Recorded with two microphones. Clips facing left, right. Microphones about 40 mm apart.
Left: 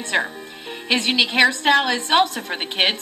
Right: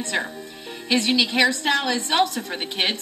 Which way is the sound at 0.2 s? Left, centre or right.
Left.